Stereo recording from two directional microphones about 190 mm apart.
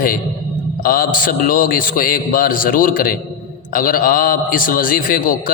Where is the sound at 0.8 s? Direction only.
50° left (ahead or behind).